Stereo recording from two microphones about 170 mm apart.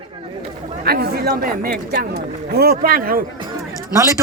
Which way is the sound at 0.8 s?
65° right (ahead or behind).